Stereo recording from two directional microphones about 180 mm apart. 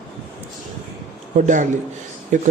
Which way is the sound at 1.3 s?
45° right (ahead or behind).